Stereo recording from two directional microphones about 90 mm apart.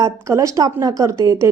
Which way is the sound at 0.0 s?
35° right (ahead or behind).